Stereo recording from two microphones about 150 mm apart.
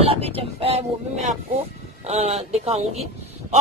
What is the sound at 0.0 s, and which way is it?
Speech, 40° right (ahead or behind).